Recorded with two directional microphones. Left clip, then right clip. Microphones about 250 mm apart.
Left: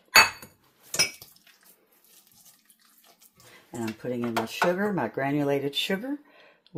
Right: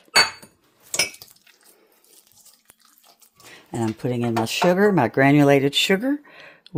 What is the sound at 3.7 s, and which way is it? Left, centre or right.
Speech, right.